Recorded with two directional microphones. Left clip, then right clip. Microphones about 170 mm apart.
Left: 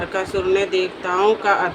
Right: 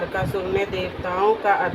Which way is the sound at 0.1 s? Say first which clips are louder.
Left 4 dB; 40° left (ahead or behind).